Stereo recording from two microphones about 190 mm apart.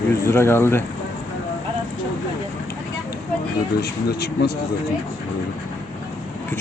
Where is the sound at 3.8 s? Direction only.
60° left (ahead or behind).